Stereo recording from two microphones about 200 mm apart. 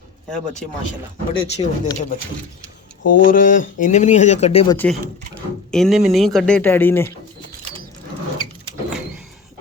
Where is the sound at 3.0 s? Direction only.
70° left (ahead or behind).